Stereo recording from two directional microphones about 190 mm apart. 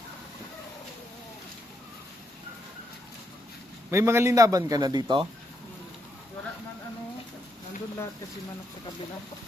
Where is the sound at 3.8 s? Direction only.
15° right (ahead or behind).